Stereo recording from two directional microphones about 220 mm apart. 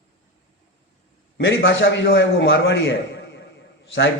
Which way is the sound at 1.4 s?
55° left (ahead or behind).